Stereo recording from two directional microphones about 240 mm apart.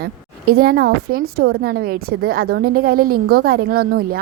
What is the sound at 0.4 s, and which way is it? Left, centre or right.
Speech, right.